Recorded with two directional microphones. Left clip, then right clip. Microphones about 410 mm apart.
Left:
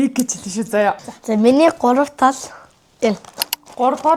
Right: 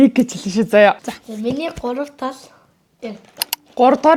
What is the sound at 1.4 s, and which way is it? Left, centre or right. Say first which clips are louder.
Speech: left 10 dB; left.